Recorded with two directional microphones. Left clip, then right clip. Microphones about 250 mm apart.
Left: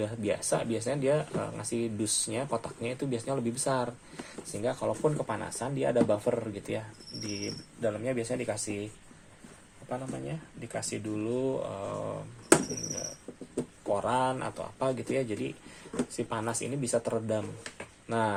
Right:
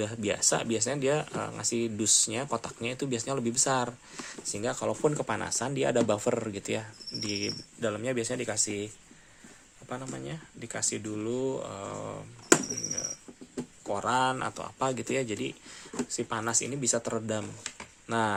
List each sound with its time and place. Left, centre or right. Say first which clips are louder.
0.0 s speech: right 2 dB; right
9.9 s speech: left 1 dB; right
13.9 s speech: right 1 dB; right